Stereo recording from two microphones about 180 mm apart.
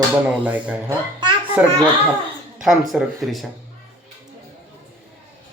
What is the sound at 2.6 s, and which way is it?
Speech, centre (ahead or behind).